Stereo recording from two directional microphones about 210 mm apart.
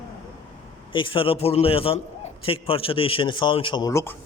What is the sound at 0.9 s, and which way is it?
A man's voice, 25° left (ahead or behind).